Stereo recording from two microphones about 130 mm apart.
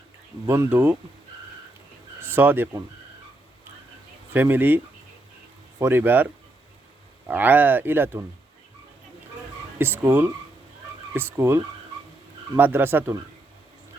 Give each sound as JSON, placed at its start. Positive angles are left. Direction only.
{"t": 0.4, "sound": "speech", "side_deg": -20}
{"t": 2.2, "sound": "speech", "side_deg": -15}
{"t": 4.3, "sound": "speech", "side_deg": -15}
{"t": 5.8, "sound": "speech", "side_deg": -15}
{"t": 7.3, "sound": "speech", "side_deg": -15}
{"t": 9.7, "sound": "speech", "side_deg": -15}